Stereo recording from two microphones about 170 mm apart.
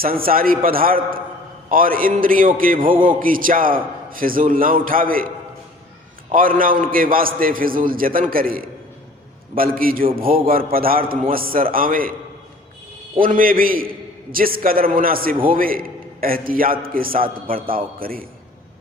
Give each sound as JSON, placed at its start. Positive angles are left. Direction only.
{"t": 0.0, "sound": "a man's voice", "side_deg": -60}
{"t": 6.3, "sound": "a man's voice", "side_deg": -55}
{"t": 13.1, "sound": "a man's voice", "side_deg": -55}